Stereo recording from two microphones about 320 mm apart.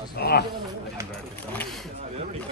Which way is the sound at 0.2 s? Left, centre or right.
Left.